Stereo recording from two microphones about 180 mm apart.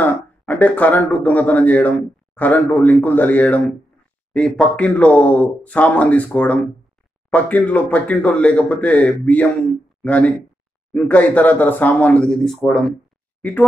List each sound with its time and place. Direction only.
0.0 s speech: 10° left (ahead or behind)